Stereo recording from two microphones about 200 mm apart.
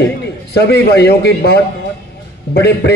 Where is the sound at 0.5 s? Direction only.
55° left (ahead or behind).